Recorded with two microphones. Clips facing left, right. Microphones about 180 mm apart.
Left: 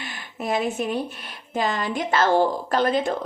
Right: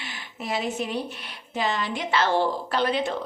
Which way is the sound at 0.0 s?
50° left (ahead or behind).